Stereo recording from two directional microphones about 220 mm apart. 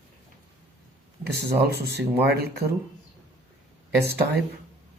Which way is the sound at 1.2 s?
45° right (ahead or behind).